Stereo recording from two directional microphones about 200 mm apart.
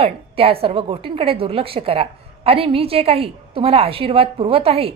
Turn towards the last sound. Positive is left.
turn(degrees=-30)  # may be behind; listen again after turning